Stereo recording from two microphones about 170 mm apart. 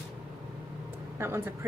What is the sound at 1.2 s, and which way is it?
Speech, 15° right (ahead or behind).